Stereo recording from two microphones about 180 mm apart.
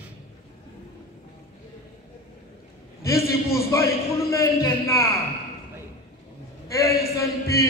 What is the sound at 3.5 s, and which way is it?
A man's voice, 15° left (ahead or behind).